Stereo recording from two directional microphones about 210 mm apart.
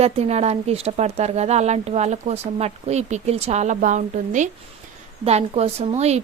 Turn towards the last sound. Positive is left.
turn(degrees=-30)  # may be behind; listen again after turning